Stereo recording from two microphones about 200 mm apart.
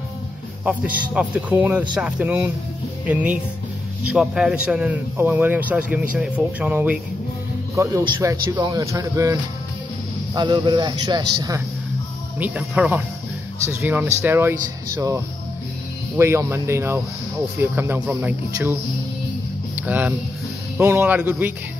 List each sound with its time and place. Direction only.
0.7 s a man's voice: 5° right (ahead or behind)
12.4 s a man's voice: 5° right (ahead or behind)